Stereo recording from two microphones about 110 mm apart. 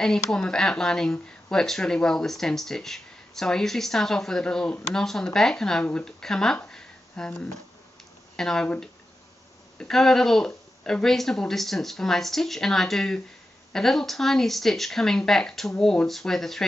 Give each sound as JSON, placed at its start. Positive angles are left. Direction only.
{"t": 0.0, "sound": "speech", "side_deg": 5}